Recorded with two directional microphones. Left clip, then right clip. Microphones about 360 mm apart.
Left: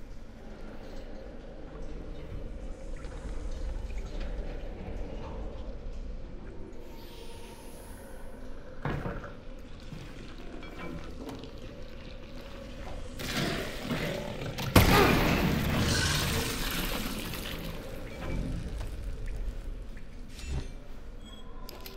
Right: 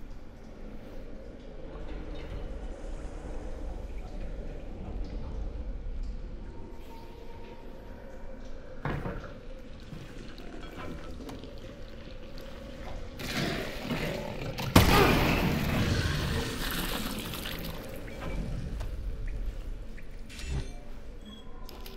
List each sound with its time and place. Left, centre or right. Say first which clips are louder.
8.8 s cupboard open or close: even; centre
10.6 s music: even; centre
12.8 s roar: left 1 dB; centre
16.2 s water: left 2 dB; centre